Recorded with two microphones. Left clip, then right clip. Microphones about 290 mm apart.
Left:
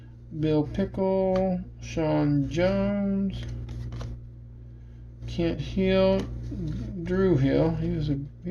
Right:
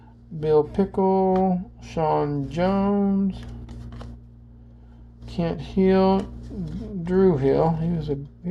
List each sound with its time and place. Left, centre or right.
0.3 s speech: right
5.2 s speech: right